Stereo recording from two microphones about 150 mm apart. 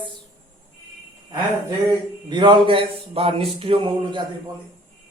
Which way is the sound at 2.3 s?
30° right (ahead or behind).